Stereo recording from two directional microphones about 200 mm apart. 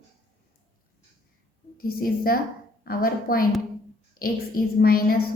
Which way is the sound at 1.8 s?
45° left (ahead or behind).